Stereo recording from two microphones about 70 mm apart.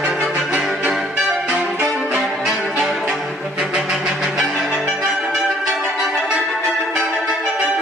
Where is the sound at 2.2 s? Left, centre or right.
Centre.